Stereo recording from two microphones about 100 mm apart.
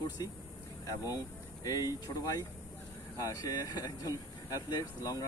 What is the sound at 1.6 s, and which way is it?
Speech, 35° left (ahead or behind).